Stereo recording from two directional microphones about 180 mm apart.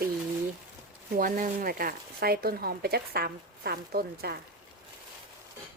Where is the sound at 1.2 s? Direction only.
50° right (ahead or behind).